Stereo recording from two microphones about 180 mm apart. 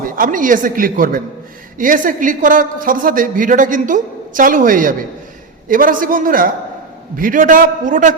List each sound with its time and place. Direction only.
0.2 s a woman's voice: 50° right (ahead or behind)